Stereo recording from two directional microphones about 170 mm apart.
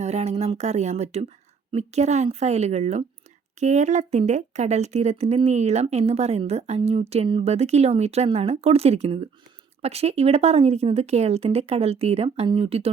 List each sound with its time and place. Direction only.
0.0 s speech: 40° right (ahead or behind)